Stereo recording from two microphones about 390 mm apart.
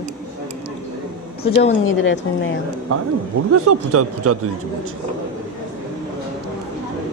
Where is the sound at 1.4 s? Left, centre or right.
Centre.